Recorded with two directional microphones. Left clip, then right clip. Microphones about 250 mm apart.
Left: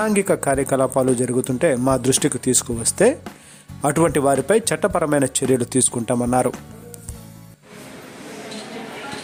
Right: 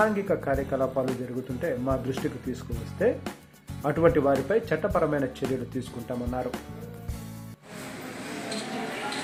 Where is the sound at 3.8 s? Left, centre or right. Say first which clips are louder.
Left 5 dB; left.